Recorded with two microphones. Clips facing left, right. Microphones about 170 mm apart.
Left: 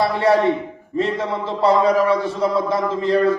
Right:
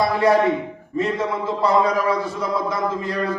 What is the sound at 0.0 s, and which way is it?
A man's voice, 30° left (ahead or behind).